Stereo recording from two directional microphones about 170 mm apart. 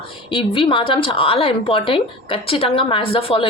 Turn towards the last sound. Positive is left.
turn(degrees=35)  # may be behind; listen again after turning